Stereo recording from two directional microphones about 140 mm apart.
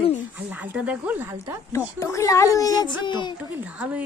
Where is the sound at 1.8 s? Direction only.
20° left (ahead or behind).